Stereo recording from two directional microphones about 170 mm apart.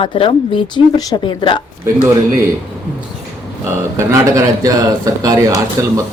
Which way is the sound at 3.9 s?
20° right (ahead or behind).